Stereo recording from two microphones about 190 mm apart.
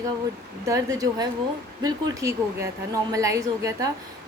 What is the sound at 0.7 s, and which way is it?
A woman's voice, 20° right (ahead or behind).